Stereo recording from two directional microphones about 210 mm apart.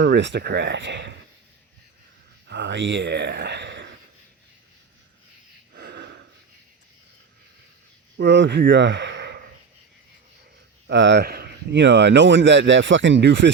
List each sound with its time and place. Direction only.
0.0 s speech: 60° right (ahead or behind)
2.5 s speech: 60° right (ahead or behind)
5.7 s a sound: 55° right (ahead or behind)
8.2 s speech: 60° right (ahead or behind)
10.8 s speech: 55° right (ahead or behind)